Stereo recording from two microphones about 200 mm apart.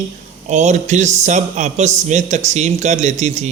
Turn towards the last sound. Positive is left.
turn(degrees=-35)  # may be behind; listen again after turning